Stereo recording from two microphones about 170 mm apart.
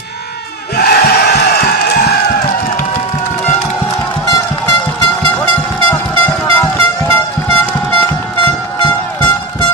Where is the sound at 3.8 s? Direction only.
20° left (ahead or behind).